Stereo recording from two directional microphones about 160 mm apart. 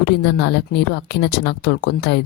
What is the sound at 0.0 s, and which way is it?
Speech, 90° left.